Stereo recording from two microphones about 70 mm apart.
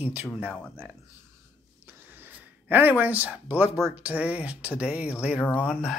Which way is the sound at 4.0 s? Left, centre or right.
Right.